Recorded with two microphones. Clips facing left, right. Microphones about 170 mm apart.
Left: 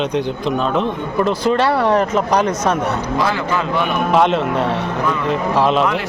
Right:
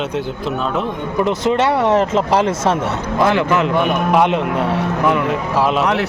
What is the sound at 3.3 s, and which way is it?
Speech, 75° right (ahead or behind).